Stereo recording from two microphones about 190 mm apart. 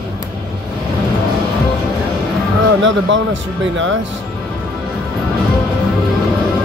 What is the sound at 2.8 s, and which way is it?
Speech, 85° right.